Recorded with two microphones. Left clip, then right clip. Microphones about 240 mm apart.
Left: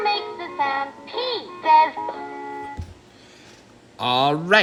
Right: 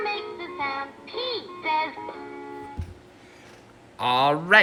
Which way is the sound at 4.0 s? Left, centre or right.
Centre.